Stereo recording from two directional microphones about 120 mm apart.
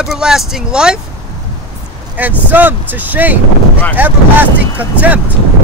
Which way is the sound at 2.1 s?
15° right (ahead or behind).